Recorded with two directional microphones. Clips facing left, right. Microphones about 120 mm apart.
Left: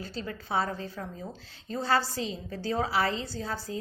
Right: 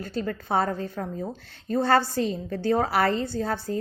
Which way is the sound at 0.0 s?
55° right (ahead or behind).